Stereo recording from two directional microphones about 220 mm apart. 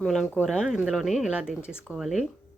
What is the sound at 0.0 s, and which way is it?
Speech, centre (ahead or behind).